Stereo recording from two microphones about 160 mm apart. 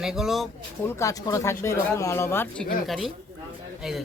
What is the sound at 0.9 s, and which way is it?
Speech, 20° left (ahead or behind).